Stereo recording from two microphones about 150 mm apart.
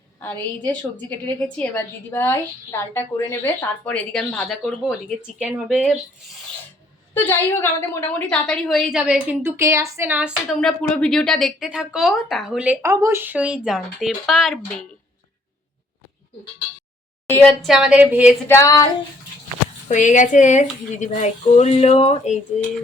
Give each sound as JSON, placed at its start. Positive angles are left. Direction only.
{"t": 0.2, "sound": "a woman's voice", "side_deg": 15}
{"t": 7.1, "sound": "a woman's voice", "side_deg": 15}
{"t": 10.6, "sound": "speech", "side_deg": 5}
{"t": 12.8, "sound": "a woman's voice", "side_deg": -20}
{"t": 17.2, "sound": "a woman's voice", "side_deg": 5}
{"t": 18.4, "sound": "female singing", "side_deg": 20}
{"t": 19.9, "sound": "speech", "side_deg": 55}